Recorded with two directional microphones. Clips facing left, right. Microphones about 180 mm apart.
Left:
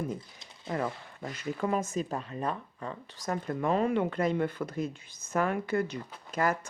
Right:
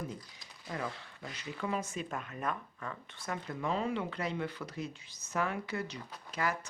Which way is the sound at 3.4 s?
50° left (ahead or behind).